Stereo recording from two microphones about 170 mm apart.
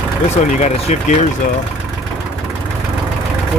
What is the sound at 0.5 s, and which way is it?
Speech, 40° left (ahead or behind).